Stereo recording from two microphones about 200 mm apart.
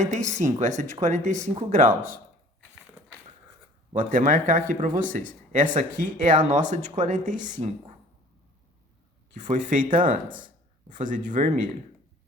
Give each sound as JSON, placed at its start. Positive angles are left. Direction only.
{"t": 0.0, "sound": "speech", "side_deg": -35}
{"t": 3.9, "sound": "speech", "side_deg": -40}
{"t": 9.3, "sound": "speech", "side_deg": -40}
{"t": 10.3, "sound": "a sound", "side_deg": -40}